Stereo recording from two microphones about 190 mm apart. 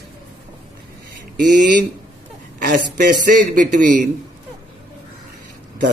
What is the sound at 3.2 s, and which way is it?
Speech, 45° right (ahead or behind).